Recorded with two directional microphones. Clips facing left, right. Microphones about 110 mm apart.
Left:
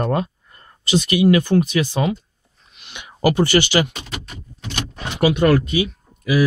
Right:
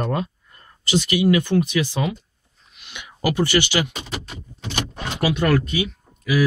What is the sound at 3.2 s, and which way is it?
Speech, 45° left (ahead or behind).